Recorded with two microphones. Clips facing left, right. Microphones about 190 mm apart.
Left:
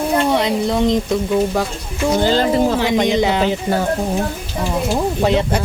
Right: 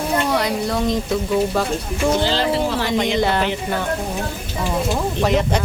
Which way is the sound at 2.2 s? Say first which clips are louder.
Left 4 dB; 45° left (ahead or behind).